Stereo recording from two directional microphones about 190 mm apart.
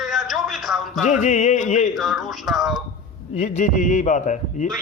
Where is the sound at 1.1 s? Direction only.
40° left (ahead or behind).